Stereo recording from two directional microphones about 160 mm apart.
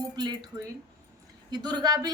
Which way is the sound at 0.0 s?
25° right (ahead or behind).